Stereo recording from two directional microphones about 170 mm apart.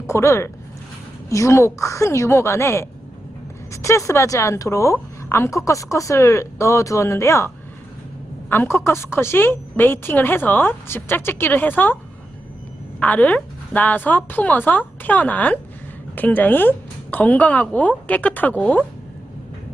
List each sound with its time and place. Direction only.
0.1 s a woman's voice: 15° left (ahead or behind)
13.0 s a woman's voice: 10° left (ahead or behind)